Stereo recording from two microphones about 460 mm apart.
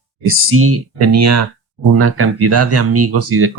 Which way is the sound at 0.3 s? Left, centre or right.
Right.